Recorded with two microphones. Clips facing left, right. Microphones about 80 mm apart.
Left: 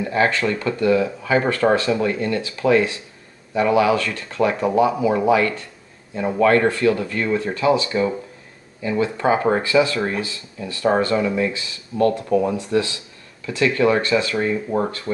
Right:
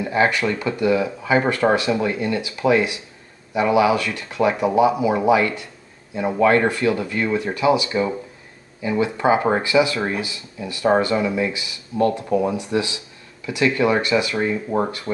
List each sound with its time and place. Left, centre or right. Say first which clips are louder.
0.0 s speech: even; centre